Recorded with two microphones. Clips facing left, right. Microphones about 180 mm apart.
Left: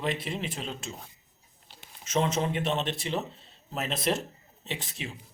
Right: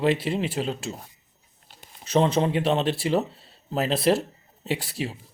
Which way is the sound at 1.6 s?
40° right (ahead or behind).